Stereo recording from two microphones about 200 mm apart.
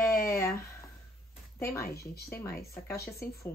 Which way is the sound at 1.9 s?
50° left (ahead or behind).